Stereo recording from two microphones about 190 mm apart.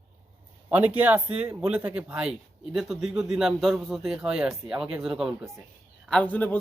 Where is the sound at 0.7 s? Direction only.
10° right (ahead or behind).